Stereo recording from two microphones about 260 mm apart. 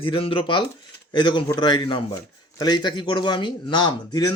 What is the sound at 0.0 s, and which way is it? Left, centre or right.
A man's voice, left.